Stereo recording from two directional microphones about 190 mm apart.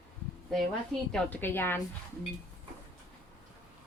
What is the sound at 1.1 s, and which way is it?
Speech, 10° left (ahead or behind).